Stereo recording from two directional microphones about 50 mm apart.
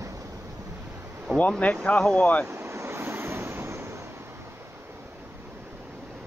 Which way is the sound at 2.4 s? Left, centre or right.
Right.